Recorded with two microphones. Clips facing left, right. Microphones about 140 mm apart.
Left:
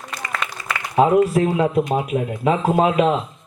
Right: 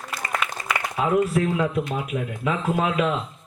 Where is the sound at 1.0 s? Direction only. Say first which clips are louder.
Left 7 dB; 35° left (ahead or behind).